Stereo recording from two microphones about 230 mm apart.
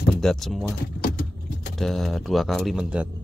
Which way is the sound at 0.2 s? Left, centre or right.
Centre.